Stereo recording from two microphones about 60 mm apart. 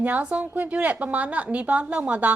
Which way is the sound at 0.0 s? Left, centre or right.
Right.